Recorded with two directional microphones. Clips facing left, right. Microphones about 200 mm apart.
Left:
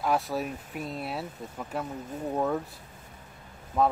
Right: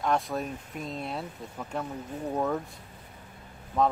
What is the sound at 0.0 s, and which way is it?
Speech, 5° left (ahead or behind).